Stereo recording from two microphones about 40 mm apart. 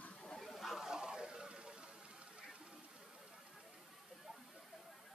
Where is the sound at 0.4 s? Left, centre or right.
Centre.